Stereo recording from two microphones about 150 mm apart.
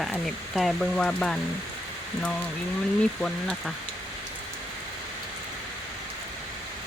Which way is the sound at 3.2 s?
5° left (ahead or behind).